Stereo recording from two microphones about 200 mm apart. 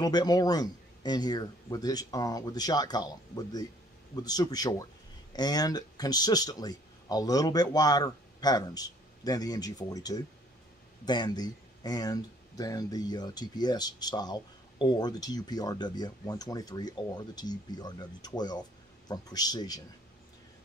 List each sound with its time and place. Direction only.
0.0 s speech: 20° left (ahead or behind)